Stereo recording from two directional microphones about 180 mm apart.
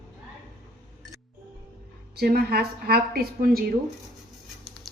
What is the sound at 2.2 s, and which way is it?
A woman's voice, 60° right (ahead or behind).